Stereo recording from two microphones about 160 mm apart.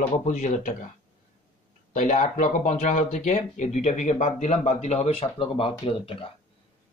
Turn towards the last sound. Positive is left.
turn(degrees=35)  # may be behind; listen again after turning